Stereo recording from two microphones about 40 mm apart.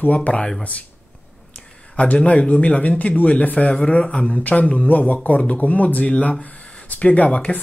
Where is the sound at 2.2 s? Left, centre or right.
Left.